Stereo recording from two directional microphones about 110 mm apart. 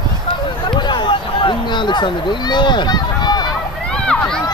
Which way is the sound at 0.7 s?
45° left (ahead or behind).